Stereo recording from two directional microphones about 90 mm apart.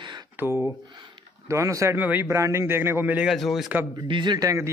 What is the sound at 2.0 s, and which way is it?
Speech, 20° right (ahead or behind).